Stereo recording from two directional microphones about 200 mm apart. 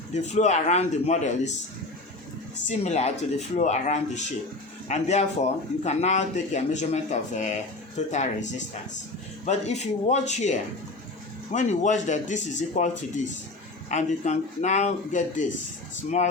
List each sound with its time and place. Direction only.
0.1 s speech: 35° left (ahead or behind)
2.6 s speech: 35° left (ahead or behind)
13.9 s speech: 35° left (ahead or behind)